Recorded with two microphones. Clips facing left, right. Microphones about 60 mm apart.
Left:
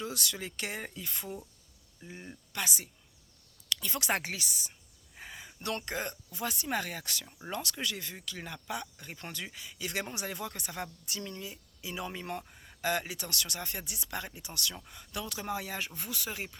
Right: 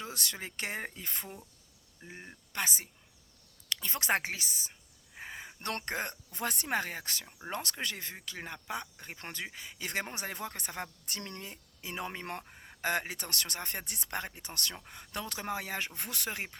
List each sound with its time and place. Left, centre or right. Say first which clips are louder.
0.0 s speech: left 2 dB; right
2.0 s speech: left 2 dB; right
2.5 s speech: right 1 dB; right
6.7 s speech: right 1 dB; right
7.3 s speech: right 1 dB; right
7.5 s speech: left 1 dB; right
11.0 s speech: left 2 dB; right
12.5 s speech: even; right